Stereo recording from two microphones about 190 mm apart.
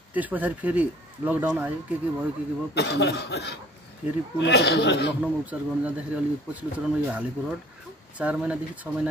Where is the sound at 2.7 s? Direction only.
60° left (ahead or behind).